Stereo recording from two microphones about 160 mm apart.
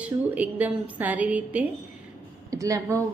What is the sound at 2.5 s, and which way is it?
Speech, 20° right (ahead or behind).